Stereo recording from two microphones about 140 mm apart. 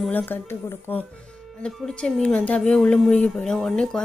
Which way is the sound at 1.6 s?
5° left (ahead or behind).